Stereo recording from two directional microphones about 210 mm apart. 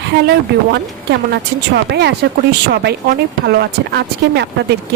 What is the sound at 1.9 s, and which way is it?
Speech, 50° right (ahead or behind).